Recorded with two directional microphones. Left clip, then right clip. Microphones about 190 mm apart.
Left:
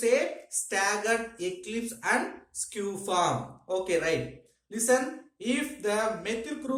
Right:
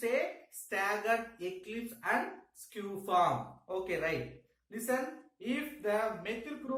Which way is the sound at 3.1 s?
30° left (ahead or behind).